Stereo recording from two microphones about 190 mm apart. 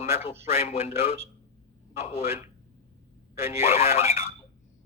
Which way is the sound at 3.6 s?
35° left (ahead or behind).